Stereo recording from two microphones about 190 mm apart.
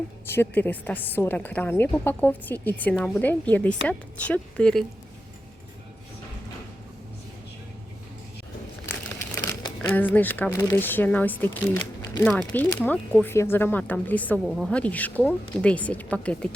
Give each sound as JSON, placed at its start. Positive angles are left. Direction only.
{"t": 0.3, "sound": "speech", "side_deg": 10}
{"t": 9.3, "sound": "crumpling", "side_deg": 15}
{"t": 9.9, "sound": "speech", "side_deg": 10}